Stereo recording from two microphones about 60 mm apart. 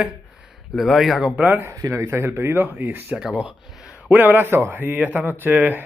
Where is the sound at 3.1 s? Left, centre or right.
Centre.